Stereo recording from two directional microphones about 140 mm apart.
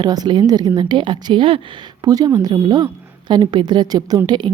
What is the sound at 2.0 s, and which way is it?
A woman's voice, 25° right (ahead or behind).